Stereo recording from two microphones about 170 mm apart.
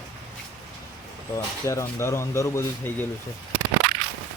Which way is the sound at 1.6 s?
15° left (ahead or behind).